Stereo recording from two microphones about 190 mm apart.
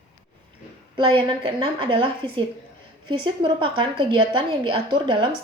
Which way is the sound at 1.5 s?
25° right (ahead or behind).